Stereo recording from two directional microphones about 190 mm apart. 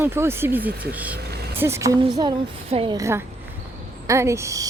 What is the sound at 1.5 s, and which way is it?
A woman's voice, 10° right (ahead or behind).